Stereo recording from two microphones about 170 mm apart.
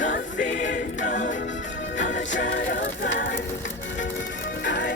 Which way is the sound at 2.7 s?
65° left (ahead or behind).